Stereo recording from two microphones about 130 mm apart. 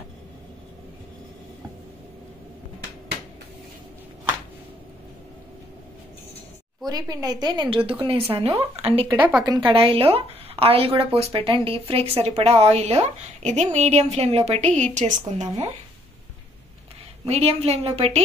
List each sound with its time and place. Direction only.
6.8 s a woman's voice: 30° right (ahead or behind); by 15.7 s 60° right (ahead or behind)
17.3 s speech: 50° right (ahead or behind)